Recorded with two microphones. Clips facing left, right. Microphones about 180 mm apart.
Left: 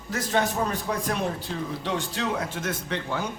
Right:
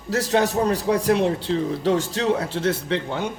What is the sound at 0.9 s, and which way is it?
Speech, 30° right (ahead or behind).